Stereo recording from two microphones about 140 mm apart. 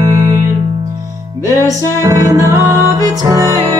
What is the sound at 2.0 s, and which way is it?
Music, 20° right (ahead or behind).